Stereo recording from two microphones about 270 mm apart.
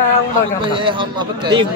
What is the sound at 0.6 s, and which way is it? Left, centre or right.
Speech, centre.